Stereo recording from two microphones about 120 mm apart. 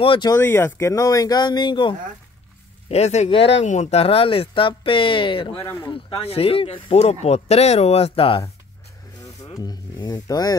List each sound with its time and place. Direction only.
0.0 s speech: 45° left (ahead or behind)
0.4 s speech: 20° left (ahead or behind); by 2.0 s 40° left (ahead or behind)
2.9 s speech: 65° left (ahead or behind)
3.3 s speech: 50° left (ahead or behind)
3.6 s speech: 75° left (ahead or behind); by 5.6 s 45° left (ahead or behind)
5.6 s speech: 25° left (ahead or behind)
5.9 s speech: 45° left (ahead or behind)
9.2 s a sound: 30° left (ahead or behind)